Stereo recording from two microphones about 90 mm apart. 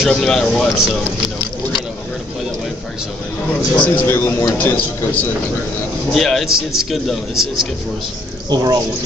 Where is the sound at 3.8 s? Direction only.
20° left (ahead or behind).